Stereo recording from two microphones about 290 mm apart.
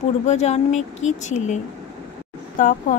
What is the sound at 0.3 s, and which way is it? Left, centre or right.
A woman's voice, left.